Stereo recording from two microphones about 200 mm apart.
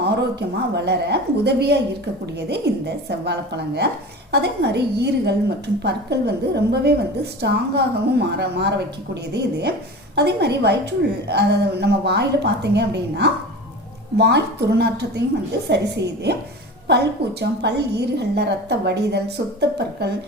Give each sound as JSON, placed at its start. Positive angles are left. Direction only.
{"t": 0.0, "sound": "a woman's voice", "side_deg": -55}